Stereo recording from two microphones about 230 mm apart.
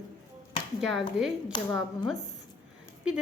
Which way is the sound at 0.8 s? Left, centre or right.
Centre.